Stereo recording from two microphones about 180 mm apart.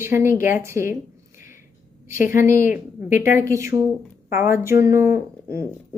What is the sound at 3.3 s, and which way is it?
Speech, 15° right (ahead or behind).